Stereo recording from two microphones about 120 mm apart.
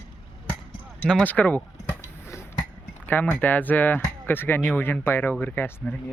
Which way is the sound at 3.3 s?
15° left (ahead or behind).